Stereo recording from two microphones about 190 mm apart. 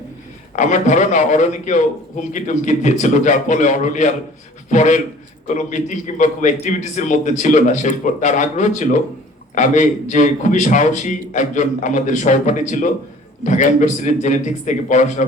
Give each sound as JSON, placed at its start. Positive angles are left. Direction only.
{"t": 0.5, "sound": "a man's voice", "side_deg": 40}